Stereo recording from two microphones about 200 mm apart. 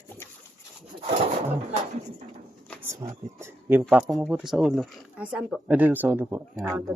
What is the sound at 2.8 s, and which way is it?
Speech, 15° right (ahead or behind).